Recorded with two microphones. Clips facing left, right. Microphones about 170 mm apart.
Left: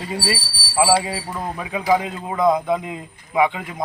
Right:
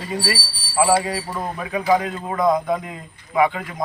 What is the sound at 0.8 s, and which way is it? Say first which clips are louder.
A man's voice: even; 15° left (ahead or behind).